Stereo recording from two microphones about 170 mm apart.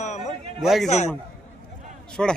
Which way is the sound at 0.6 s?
Centre (ahead or behind).